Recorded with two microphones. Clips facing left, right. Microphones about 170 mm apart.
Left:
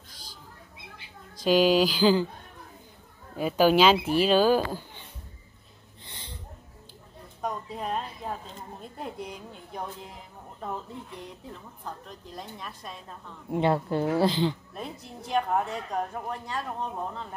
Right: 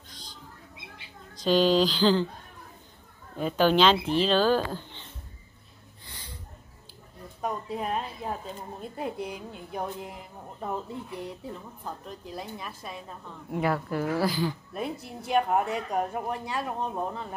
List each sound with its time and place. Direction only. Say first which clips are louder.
1.3 s speech: left 1 dB; 10° left (ahead or behind)
3.3 s speech: left 2 dB; 10° left (ahead or behind)
6.0 s a sound: left 1 dB; 25° left (ahead or behind)
7.4 s a woman's voice: right 1 dB; 5° right (ahead or behind)
13.5 s a woman's voice: left 3 dB; 25° left (ahead or behind)
14.7 s a woman's voice: right 5 dB; 10° right (ahead or behind)